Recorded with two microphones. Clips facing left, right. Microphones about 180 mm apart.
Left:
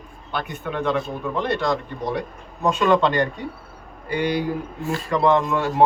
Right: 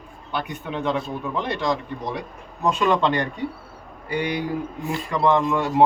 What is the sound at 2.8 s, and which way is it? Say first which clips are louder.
Speech: left 3 dB; 15° right (ahead or behind).